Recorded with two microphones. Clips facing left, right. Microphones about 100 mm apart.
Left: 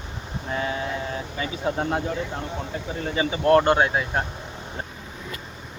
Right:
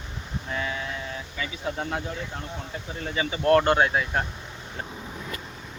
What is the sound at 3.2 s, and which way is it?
Speech, 25° left (ahead or behind).